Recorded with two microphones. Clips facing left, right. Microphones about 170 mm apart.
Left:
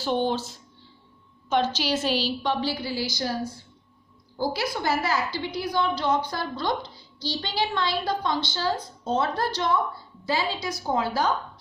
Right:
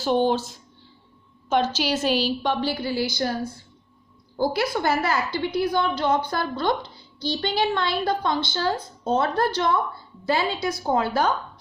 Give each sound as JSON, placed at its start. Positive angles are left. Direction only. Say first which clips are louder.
{"t": 0.0, "sound": "a woman's voice", "louder": "right 4 dB", "side_deg": -45}
{"t": 1.5, "sound": "a woman's voice", "louder": "right 2 dB", "side_deg": -45}
{"t": 4.4, "sound": "a woman's voice", "louder": "right 4 dB", "side_deg": -55}